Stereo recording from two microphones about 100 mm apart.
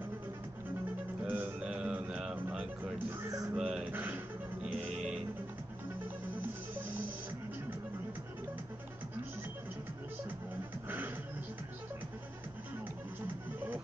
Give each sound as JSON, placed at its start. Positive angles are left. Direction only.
{"t": 1.2, "sound": "music", "side_deg": -15}
{"t": 3.3, "sound": "music", "side_deg": -35}
{"t": 3.5, "sound": "a sound", "side_deg": -10}
{"t": 4.6, "sound": "music", "side_deg": -10}